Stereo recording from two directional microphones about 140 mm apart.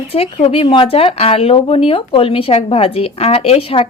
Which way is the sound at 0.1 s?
45° left (ahead or behind).